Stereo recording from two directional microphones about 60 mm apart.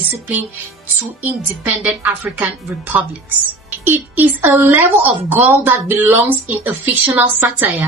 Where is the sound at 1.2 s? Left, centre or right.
Right.